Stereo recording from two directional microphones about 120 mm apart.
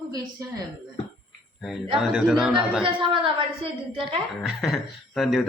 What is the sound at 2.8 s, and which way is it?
Speech, 45° right (ahead or behind).